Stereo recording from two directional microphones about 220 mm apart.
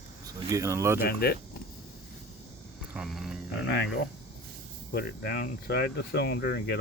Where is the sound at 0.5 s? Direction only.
15° right (ahead or behind).